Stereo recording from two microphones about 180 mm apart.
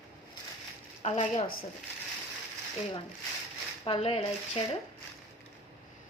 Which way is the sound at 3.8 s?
30° left (ahead or behind).